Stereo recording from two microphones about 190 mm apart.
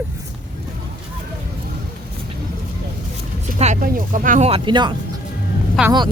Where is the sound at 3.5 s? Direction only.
35° right (ahead or behind).